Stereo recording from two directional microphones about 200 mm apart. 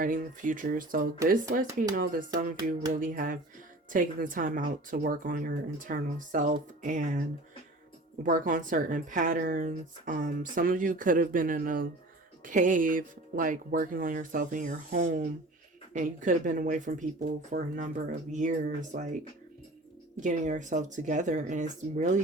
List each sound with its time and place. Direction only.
0.0 s speech: 40° right (ahead or behind)
2.9 s speech: 40° right (ahead or behind)
8.2 s speech: 40° right (ahead or behind)